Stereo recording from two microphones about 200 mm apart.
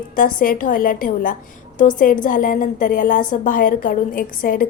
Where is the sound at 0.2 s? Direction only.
45° left (ahead or behind).